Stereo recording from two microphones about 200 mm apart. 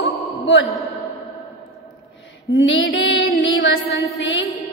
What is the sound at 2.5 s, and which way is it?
Music, 70° left (ahead or behind).